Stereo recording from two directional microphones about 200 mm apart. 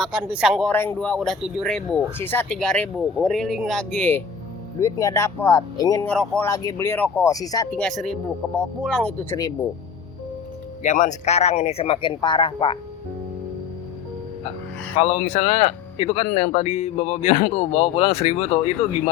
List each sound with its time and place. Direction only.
0.0 s speech: 5° right (ahead or behind); by 6.1 s 20° left (ahead or behind)
6.1 s speech: 5° left (ahead or behind)
6.5 s speech: 15° left (ahead or behind)
7.8 s speech: 5° left (ahead or behind)
10.8 s speech: 35° left (ahead or behind)
14.9 s speech: 30° left (ahead or behind)